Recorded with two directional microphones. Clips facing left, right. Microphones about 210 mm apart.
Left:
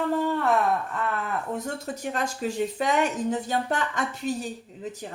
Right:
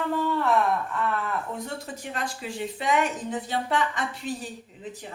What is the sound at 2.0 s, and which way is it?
Speech, 45° left (ahead or behind).